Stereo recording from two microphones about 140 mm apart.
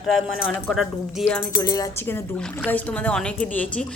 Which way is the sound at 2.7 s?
10° left (ahead or behind).